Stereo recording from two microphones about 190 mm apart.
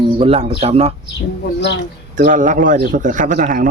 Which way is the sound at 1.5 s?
65° left (ahead or behind).